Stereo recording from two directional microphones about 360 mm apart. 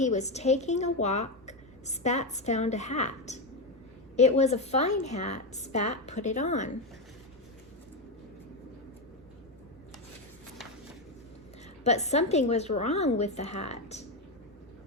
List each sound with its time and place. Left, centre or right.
0.0 s a woman's voice: centre
11.8 s a woman's voice: centre